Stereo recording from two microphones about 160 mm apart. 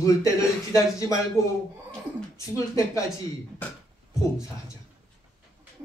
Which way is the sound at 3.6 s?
10° left (ahead or behind).